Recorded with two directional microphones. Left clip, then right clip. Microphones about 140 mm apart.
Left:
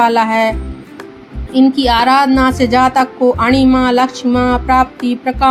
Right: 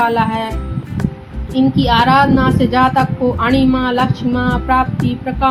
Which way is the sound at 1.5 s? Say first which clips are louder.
Left 2 dB; 50° left (ahead or behind).